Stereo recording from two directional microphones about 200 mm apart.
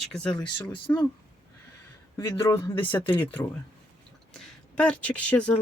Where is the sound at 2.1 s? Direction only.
15° left (ahead or behind).